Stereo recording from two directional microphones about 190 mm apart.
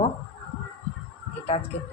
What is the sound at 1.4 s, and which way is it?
Speech, 30° left (ahead or behind).